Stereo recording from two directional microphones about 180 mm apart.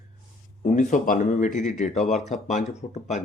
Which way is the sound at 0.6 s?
45° left (ahead or behind).